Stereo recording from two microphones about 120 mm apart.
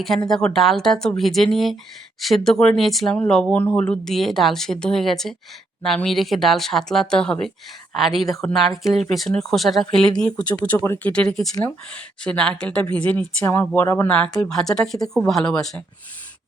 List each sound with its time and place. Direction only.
0.3 s speech: 5° left (ahead or behind)
11.1 s speech: 10° left (ahead or behind)